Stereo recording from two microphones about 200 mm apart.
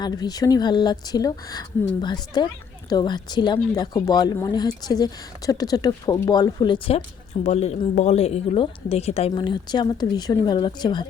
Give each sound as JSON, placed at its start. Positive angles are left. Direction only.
{"t": 0.0, "sound": "speech", "side_deg": 20}